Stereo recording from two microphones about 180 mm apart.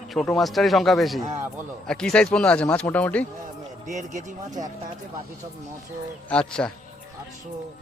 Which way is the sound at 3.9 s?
40° right (ahead or behind).